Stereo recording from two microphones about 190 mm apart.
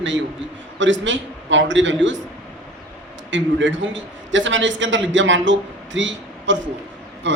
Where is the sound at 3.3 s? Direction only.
75° right (ahead or behind).